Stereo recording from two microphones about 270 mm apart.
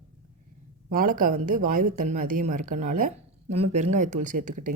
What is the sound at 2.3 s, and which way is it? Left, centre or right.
Speech, right.